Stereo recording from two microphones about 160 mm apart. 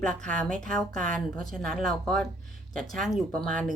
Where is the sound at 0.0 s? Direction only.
5° left (ahead or behind).